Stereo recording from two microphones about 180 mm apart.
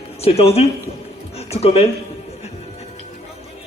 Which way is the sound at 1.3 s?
35° left (ahead or behind).